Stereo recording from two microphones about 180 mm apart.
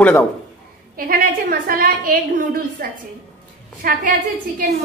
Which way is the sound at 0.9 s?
55° right (ahead or behind).